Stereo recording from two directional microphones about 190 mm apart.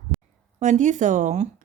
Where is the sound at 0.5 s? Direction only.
40° right (ahead or behind).